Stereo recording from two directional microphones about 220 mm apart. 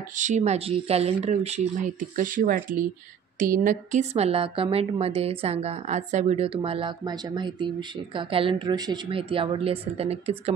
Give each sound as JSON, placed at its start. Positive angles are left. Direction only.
{"t": 0.2, "sound": "a woman's voice", "side_deg": -30}